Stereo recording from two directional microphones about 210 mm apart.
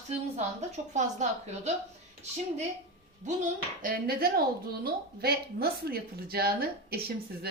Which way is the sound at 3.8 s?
45° right (ahead or behind).